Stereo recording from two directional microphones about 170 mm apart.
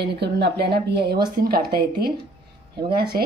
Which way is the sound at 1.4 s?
60° right (ahead or behind).